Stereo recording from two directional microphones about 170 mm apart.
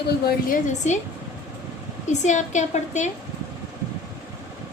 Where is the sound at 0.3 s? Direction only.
50° left (ahead or behind).